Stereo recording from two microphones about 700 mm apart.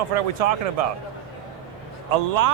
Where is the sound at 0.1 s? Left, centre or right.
Right.